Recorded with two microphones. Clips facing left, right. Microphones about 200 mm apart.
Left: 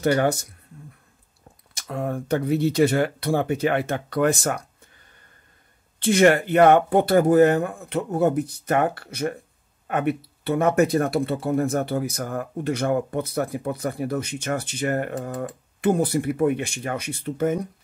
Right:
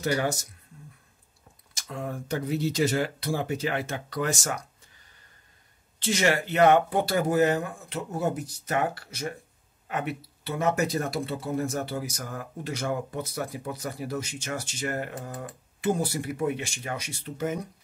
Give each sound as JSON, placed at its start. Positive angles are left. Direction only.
{"t": 0.0, "sound": "speech", "side_deg": 60}
{"t": 1.7, "sound": "speech", "side_deg": 60}
{"t": 6.0, "sound": "speech", "side_deg": 55}